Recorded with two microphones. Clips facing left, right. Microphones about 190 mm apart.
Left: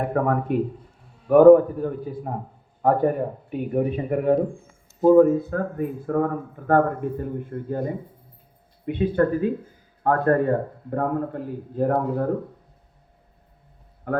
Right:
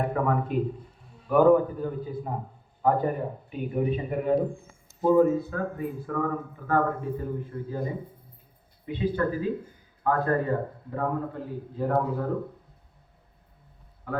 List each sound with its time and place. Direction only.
0.1 s speech: 55° left (ahead or behind)
14.1 s speech: 55° left (ahead or behind)